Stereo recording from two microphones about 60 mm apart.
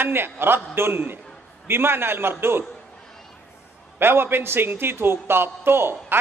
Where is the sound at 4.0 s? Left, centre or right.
Right.